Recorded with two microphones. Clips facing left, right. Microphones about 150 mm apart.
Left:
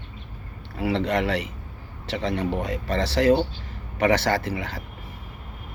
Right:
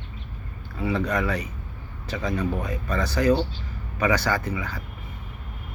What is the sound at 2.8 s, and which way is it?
Speech, 30° left (ahead or behind).